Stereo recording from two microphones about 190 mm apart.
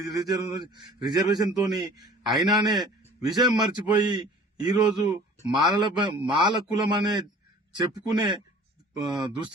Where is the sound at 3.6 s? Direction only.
25° right (ahead or behind).